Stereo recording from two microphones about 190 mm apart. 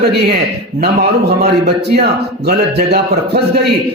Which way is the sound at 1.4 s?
60° right (ahead or behind).